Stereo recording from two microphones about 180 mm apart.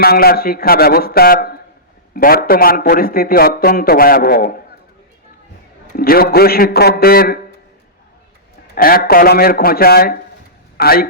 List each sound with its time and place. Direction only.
0.0 s a man's voice: 60° left (ahead or behind)
6.0 s a man's voice: 55° left (ahead or behind)
8.7 s a man's voice: 55° left (ahead or behind)